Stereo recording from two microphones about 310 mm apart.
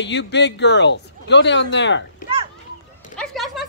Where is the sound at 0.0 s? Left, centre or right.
Left.